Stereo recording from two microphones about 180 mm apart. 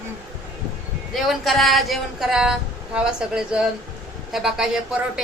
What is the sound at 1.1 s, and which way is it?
Speech, centre (ahead or behind).